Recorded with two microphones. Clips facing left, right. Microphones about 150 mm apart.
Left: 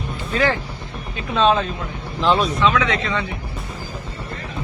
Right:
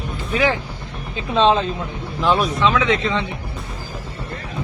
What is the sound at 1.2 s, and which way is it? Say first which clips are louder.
Speech: right 1 dB; 25° right (ahead or behind).